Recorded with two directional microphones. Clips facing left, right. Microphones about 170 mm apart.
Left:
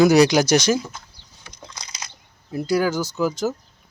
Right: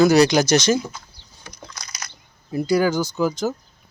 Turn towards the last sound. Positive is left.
turn(degrees=5)  # may be behind; listen again after turning